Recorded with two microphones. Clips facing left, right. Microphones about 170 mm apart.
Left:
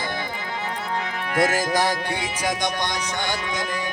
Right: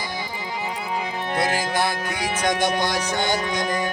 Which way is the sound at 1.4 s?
40° left (ahead or behind).